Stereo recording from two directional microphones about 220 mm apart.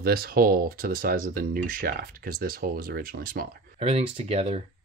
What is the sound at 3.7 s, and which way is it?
Speech, 30° right (ahead or behind).